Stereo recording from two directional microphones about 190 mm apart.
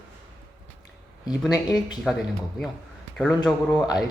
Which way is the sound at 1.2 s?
20° left (ahead or behind).